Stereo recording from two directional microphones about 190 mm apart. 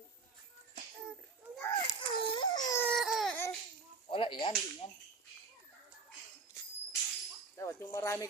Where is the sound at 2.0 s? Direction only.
25° left (ahead or behind).